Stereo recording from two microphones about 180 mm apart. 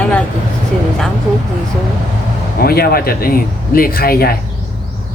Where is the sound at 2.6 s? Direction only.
55° left (ahead or behind).